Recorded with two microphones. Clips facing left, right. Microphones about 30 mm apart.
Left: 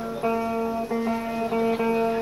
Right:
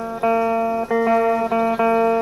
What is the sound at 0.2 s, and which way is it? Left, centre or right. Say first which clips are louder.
Music: right 7 dB; right.